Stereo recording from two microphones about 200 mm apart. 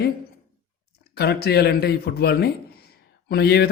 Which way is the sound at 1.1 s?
55° left (ahead or behind).